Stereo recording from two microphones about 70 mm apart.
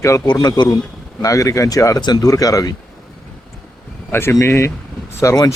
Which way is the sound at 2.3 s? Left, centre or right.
Left.